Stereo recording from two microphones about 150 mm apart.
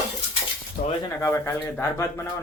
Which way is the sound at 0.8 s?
65° left (ahead or behind).